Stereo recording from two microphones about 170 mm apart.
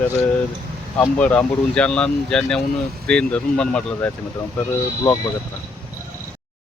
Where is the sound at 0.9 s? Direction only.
10° left (ahead or behind).